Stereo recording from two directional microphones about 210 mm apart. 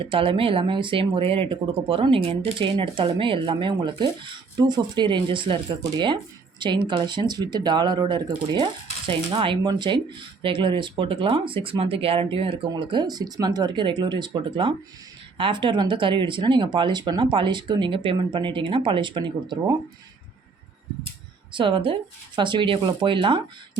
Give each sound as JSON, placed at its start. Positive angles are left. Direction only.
{"t": 0.0, "sound": "speech", "side_deg": -25}
{"t": 21.5, "sound": "speech", "side_deg": -25}